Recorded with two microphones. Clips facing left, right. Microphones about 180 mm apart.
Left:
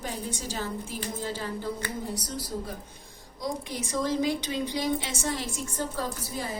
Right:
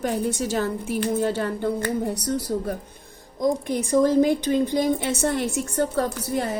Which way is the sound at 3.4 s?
55° right (ahead or behind).